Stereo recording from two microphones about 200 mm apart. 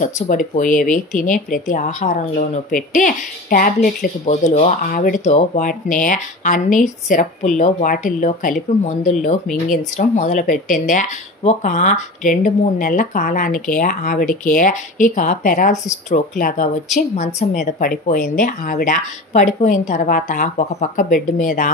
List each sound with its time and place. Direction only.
0.0 s speech: 40° left (ahead or behind)